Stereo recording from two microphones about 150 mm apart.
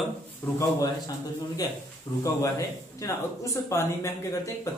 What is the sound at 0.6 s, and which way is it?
A woman's voice, 25° left (ahead or behind).